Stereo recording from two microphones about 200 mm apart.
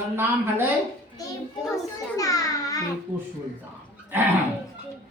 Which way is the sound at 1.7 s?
15° left (ahead or behind).